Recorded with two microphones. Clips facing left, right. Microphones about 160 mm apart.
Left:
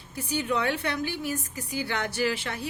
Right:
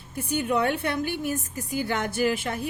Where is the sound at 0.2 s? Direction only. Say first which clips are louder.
Right 3 dB; 55° right (ahead or behind).